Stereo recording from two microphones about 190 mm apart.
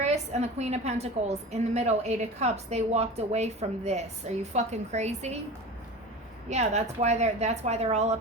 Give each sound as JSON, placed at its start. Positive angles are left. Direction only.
{"t": 0.0, "sound": "a woman's voice", "side_deg": -35}
{"t": 6.5, "sound": "a woman's voice", "side_deg": -35}